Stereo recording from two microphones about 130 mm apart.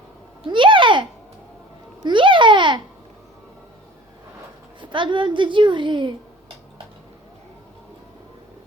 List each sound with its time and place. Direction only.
0.4 s a sound: 40° right (ahead or behind)
2.0 s babbling: 40° right (ahead or behind)
4.8 s a woman's voice: 40° right (ahead or behind)